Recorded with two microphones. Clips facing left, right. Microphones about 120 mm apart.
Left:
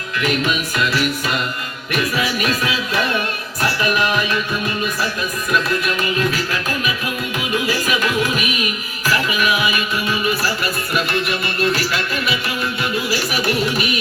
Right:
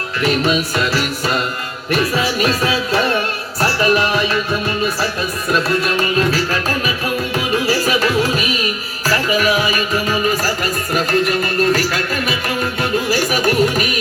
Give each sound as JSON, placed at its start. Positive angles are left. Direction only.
{"t": 0.2, "sound": "music", "side_deg": -35}